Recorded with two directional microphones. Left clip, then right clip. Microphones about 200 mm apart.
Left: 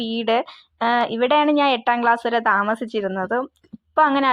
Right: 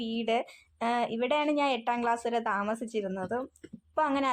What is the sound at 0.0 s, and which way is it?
Speech, 25° left (ahead or behind).